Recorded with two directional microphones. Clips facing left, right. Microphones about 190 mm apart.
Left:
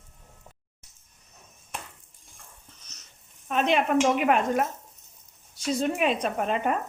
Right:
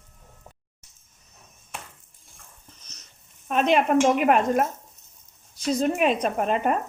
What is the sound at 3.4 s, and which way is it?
Speech, 45° right (ahead or behind).